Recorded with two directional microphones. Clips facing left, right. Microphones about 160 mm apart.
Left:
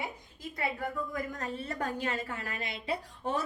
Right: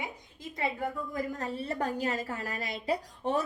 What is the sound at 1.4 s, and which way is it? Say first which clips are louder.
A woman's voice: right 3 dB; 35° right (ahead or behind).